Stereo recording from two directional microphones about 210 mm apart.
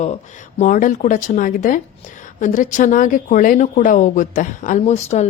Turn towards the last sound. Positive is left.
turn(degrees=30)  # may be behind; listen again after turning